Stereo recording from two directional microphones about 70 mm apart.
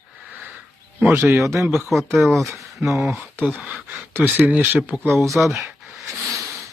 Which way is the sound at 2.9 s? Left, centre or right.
Centre.